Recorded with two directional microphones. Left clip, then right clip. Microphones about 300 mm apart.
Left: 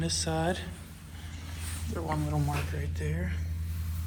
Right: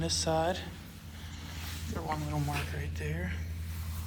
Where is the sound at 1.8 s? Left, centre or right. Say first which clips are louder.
Left 3 dB; centre.